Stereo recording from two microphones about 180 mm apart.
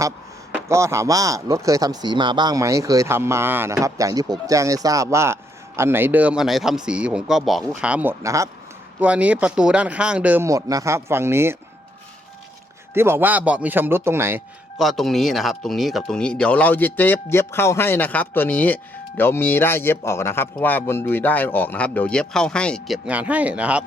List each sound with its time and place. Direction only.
0.7 s speech: 15° right (ahead or behind)
12.9 s speech: 15° right (ahead or behind)
14.8 s speech: centre (ahead or behind)
23.0 s speech: 10° right (ahead or behind)